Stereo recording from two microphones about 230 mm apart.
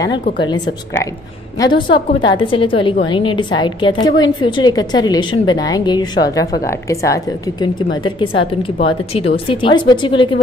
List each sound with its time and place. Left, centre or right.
1.6 s a woman's voice: left